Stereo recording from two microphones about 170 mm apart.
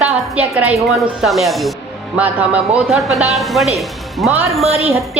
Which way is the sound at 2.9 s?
Centre (ahead or behind).